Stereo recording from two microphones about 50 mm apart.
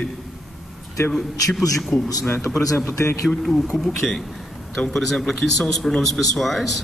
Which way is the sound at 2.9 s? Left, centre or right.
Left.